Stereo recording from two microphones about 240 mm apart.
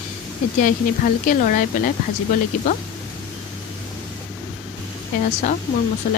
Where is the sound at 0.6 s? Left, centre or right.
Left.